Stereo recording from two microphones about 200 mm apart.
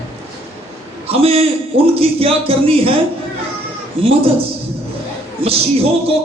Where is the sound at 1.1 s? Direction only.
30° right (ahead or behind).